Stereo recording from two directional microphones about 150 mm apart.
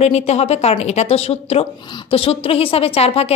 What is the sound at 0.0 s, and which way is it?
A woman's voice, 45° left (ahead or behind).